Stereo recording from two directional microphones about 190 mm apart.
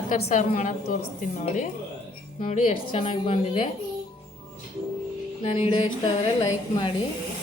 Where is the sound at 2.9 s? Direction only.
30° left (ahead or behind).